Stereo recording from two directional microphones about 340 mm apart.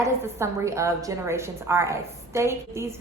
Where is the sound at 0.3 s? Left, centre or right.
Centre.